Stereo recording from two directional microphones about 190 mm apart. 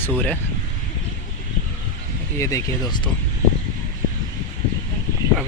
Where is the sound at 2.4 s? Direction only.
15° left (ahead or behind).